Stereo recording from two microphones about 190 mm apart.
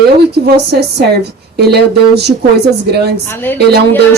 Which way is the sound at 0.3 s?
60° right (ahead or behind).